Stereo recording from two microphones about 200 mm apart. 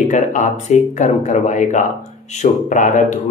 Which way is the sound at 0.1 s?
40° left (ahead or behind).